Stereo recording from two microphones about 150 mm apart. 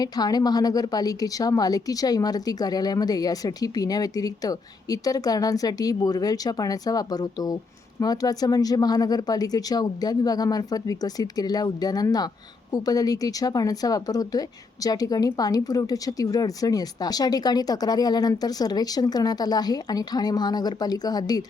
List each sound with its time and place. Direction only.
0.0 s a woman's voice: 25° left (ahead or behind)